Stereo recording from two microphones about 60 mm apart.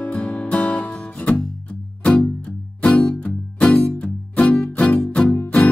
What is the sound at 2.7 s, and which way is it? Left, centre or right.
Music, left.